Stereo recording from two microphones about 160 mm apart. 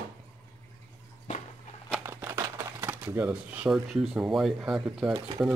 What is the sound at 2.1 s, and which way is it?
Speech, 15° right (ahead or behind).